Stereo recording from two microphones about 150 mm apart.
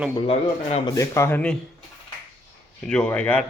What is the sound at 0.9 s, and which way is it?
Speech, 20° left (ahead or behind).